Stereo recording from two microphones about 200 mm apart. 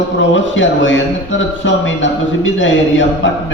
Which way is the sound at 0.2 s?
70° left (ahead or behind).